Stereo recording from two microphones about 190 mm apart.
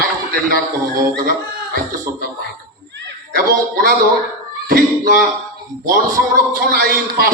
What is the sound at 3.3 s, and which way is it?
A man's voice, 50° right (ahead or behind).